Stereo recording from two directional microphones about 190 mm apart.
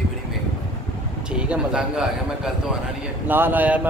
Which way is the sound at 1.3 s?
5° right (ahead or behind).